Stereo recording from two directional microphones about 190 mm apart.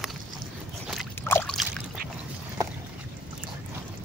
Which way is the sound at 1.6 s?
Centre (ahead or behind).